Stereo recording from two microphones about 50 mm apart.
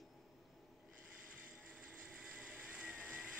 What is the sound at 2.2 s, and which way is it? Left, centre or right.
Vehicle, centre.